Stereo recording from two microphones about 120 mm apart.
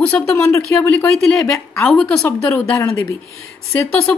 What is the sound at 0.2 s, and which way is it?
Speech, 25° left (ahead or behind).